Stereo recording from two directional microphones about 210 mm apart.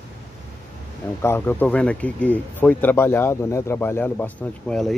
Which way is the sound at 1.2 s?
10° left (ahead or behind).